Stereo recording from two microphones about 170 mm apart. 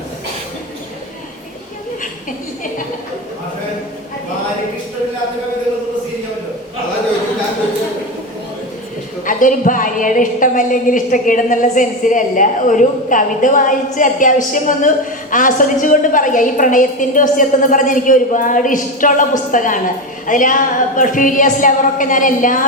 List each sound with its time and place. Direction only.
9.2 s a woman's voice: 50° left (ahead or behind)